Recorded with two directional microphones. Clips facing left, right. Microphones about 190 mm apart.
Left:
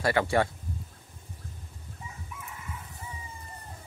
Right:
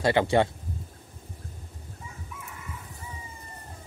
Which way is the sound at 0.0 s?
20° right (ahead or behind).